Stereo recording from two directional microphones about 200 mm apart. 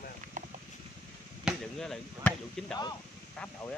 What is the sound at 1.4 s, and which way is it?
Speech, centre (ahead or behind).